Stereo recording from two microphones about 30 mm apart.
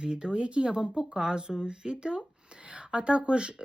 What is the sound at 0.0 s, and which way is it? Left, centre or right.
Speech, right.